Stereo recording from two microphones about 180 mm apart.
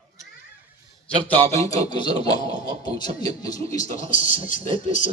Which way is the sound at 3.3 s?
20° left (ahead or behind).